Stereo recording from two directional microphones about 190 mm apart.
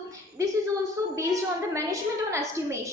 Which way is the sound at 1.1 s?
15° right (ahead or behind).